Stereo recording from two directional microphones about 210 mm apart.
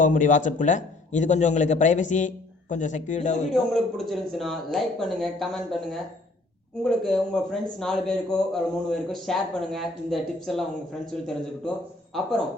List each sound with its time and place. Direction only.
0.0 s a man's voice: 35° left (ahead or behind)
3.5 s a man's voice: centre (ahead or behind)